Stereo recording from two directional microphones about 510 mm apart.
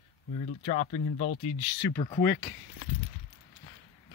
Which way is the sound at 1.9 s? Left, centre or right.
Centre.